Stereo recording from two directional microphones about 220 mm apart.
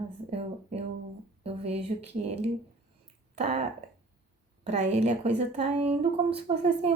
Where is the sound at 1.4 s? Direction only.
25° right (ahead or behind).